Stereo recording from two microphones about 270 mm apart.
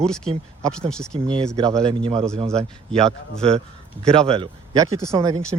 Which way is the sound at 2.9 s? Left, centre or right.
Centre.